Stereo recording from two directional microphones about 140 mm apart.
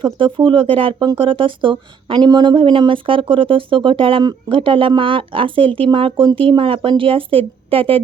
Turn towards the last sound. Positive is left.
turn(degrees=-40)  # may be behind; listen again after turning